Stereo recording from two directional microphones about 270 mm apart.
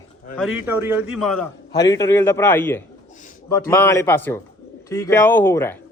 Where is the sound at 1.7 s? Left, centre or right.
Centre.